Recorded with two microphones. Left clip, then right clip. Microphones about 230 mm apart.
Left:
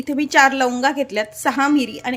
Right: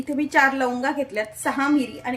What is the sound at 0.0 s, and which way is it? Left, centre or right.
Speech, left.